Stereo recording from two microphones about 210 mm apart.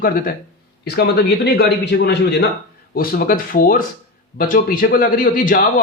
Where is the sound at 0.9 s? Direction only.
50° left (ahead or behind).